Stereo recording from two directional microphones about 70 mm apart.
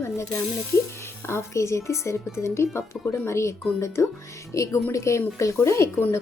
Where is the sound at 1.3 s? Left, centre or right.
Left.